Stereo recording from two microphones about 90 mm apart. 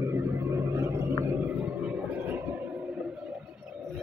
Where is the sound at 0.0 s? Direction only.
25° right (ahead or behind).